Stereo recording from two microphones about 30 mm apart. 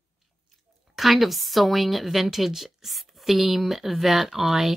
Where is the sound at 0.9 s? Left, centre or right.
Centre.